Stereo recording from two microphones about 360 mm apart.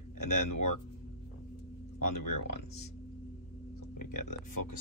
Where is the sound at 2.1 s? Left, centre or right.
Left.